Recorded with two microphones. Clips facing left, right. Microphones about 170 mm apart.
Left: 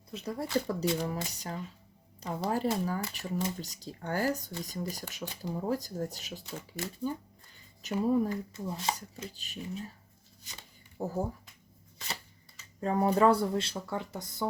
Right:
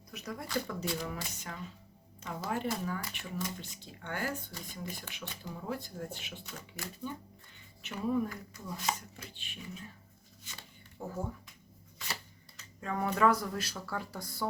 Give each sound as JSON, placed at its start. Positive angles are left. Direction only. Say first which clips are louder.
{"t": 0.1, "sound": "speech", "louder": "left 5 dB", "side_deg": 30}
{"t": 10.9, "sound": "speech", "louder": "left 6 dB", "side_deg": 40}
{"t": 12.8, "sound": "speech", "louder": "left 4 dB", "side_deg": 35}